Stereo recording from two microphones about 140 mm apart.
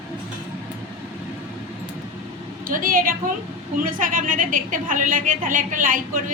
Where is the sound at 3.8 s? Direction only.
80° right.